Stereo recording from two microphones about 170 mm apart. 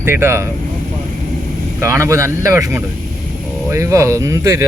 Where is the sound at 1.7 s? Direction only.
15° right (ahead or behind).